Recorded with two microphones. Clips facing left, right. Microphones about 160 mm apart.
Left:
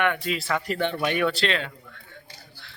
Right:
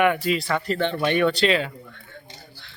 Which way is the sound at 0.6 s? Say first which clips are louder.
Right 3 dB; 10° left (ahead or behind).